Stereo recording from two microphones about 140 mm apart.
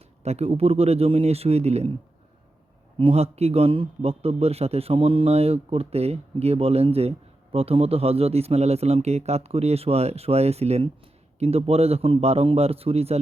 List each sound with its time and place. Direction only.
0.2 s a man's voice: 50° right (ahead or behind)
3.0 s a man's voice: 45° right (ahead or behind)